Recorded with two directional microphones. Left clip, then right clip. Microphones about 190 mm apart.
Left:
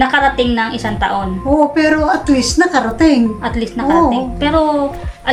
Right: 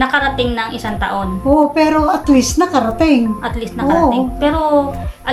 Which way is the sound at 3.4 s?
5° left (ahead or behind).